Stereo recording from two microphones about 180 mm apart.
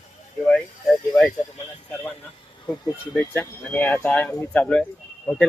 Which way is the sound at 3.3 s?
10° left (ahead or behind).